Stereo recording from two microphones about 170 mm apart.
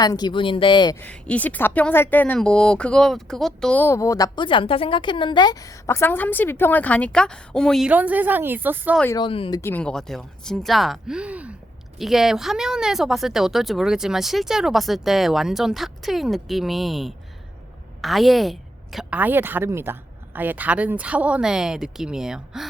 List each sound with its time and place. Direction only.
0.0 s speech: 25° left (ahead or behind)
0.9 s speech: 10° left (ahead or behind)
7.9 s a woman's voice: 10° right (ahead or behind)
9.1 s speech: 30° left (ahead or behind)
9.6 s a woman's voice: 10° left (ahead or behind)